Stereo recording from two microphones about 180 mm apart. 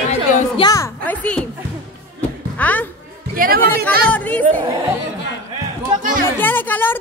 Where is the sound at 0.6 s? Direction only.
20° left (ahead or behind).